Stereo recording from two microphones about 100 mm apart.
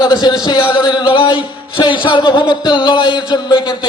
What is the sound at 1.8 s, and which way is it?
A man's voice, 55° left (ahead or behind).